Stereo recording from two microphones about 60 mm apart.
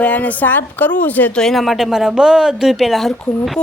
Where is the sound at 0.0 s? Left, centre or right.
Left.